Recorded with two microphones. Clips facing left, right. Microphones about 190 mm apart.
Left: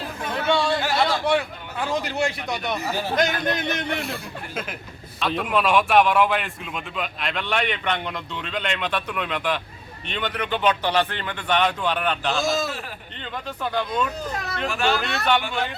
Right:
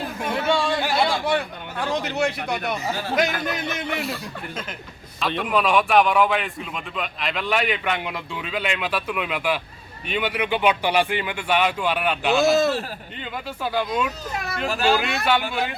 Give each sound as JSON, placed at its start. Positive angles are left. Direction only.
{"t": 0.4, "sound": "a sound", "side_deg": -10}
{"t": 1.2, "sound": "a man's voice", "side_deg": 0}
{"t": 5.2, "sound": "a man's voice", "side_deg": 0}
{"t": 14.7, "sound": "speech", "side_deg": -35}
{"t": 14.9, "sound": "a man's voice", "side_deg": -10}